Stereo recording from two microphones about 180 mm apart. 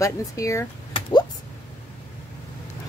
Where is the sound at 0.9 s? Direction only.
25° left (ahead or behind).